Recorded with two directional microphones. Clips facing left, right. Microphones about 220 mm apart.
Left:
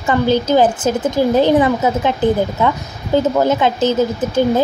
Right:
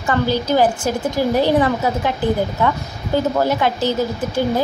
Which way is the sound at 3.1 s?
20° left (ahead or behind).